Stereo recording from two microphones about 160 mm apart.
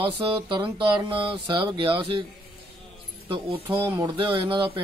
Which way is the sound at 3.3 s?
35° right (ahead or behind).